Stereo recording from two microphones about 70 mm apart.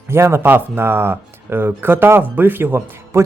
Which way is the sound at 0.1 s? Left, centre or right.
Right.